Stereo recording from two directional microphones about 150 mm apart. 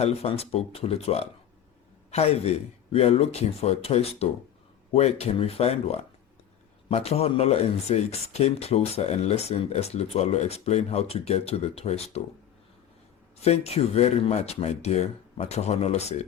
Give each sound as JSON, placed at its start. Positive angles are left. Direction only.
{"t": 0.0, "sound": "speech", "side_deg": 45}
{"t": 13.4, "sound": "speech", "side_deg": 45}